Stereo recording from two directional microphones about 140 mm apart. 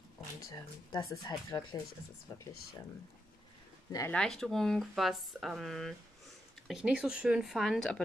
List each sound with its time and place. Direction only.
0.5 s speech: 25° left (ahead or behind)
4.1 s speech: 5° left (ahead or behind)